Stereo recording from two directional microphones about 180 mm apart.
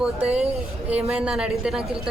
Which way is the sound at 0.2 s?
35° right (ahead or behind).